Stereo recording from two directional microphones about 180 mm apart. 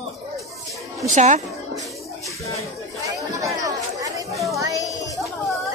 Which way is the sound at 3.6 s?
20° right (ahead or behind).